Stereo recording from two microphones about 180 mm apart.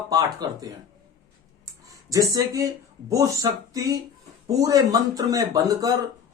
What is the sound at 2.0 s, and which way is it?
A man's voice, 20° right (ahead or behind).